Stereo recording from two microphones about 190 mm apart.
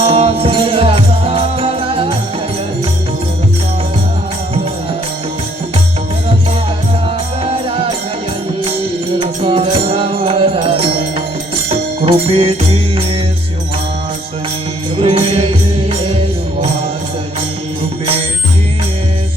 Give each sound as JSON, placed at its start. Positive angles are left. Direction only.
{"t": 0.0, "sound": "music", "side_deg": -30}
{"t": 7.4, "sound": "music", "side_deg": -30}
{"t": 9.2, "sound": "music", "side_deg": -30}
{"t": 12.0, "sound": "music", "side_deg": -30}
{"t": 14.9, "sound": "music", "side_deg": -30}